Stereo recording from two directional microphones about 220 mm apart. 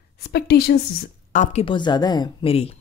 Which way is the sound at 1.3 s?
30° left (ahead or behind).